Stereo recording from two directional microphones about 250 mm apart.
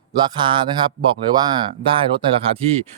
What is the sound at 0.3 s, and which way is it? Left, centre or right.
Speech, centre.